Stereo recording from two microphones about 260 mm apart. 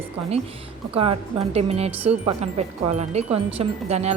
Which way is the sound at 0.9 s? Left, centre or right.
Right.